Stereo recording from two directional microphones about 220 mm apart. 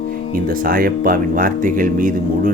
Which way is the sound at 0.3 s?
40° right (ahead or behind).